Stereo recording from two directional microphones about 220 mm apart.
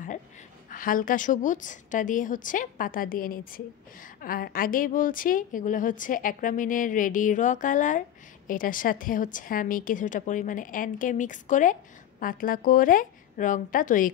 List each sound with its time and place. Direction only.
0.7 s a woman's voice: 40° left (ahead or behind)